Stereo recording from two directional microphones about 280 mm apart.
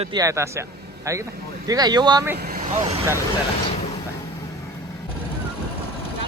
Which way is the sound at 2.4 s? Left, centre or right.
Right.